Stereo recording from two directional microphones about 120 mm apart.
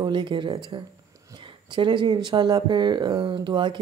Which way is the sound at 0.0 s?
40° right (ahead or behind).